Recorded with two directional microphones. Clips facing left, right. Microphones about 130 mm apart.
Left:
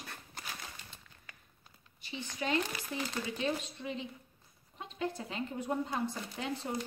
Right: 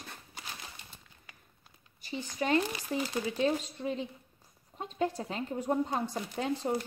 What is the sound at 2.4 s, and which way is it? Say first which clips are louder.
Speech: right 5 dB; 40° right (ahead or behind).